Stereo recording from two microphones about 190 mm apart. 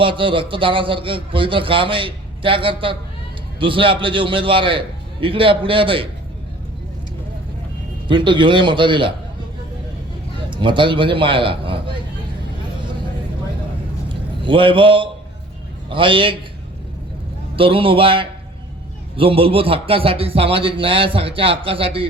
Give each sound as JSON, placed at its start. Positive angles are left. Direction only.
{"t": 0.0, "sound": "a man's voice", "side_deg": -25}
{"t": 8.0, "sound": "a man's voice", "side_deg": -25}
{"t": 10.5, "sound": "a man's voice", "side_deg": -25}
{"t": 14.1, "sound": "a man's voice", "side_deg": -25}
{"t": 17.6, "sound": "a man's voice", "side_deg": -30}